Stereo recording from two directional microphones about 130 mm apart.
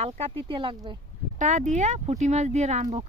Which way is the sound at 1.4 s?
70° right (ahead or behind).